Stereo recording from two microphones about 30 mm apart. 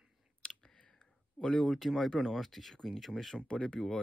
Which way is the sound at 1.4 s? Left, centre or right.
Left.